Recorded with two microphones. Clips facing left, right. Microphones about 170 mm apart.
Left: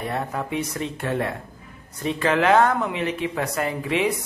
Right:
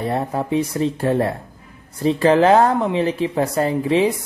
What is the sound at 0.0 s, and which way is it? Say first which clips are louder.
Speech: right 5 dB; 30° right (ahead or behind).